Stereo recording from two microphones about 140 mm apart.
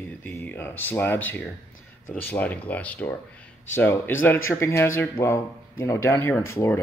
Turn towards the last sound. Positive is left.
turn(degrees=20)  # may be behind; listen again after turning